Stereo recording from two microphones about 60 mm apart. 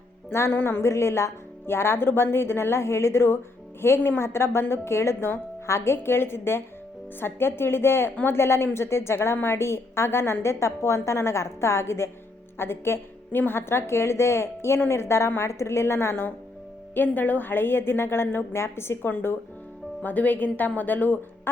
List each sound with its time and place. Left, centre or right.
0.3 s a woman's voice: left
16.9 s a woman's voice: left